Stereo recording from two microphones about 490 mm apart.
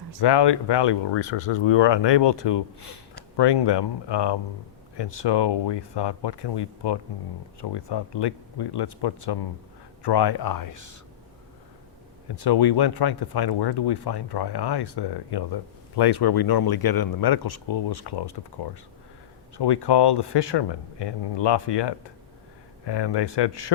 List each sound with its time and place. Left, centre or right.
0.2 s speech: left
1.3 s speech: left
12.4 s speech: left